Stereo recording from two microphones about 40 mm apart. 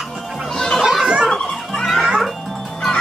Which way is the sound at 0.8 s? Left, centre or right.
Centre.